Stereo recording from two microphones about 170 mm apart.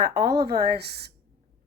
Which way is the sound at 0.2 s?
70° right (ahead or behind).